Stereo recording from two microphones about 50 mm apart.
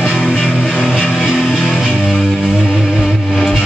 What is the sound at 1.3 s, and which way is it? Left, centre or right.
Music, centre.